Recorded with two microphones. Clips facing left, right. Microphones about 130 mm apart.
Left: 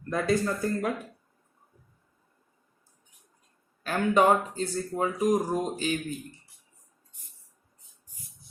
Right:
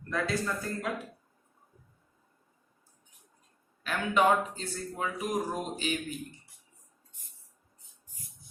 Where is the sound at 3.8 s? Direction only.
40° left (ahead or behind).